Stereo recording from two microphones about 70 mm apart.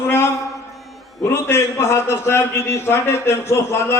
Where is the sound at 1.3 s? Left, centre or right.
Left.